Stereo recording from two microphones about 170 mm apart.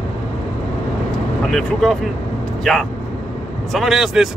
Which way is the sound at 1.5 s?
5° left (ahead or behind).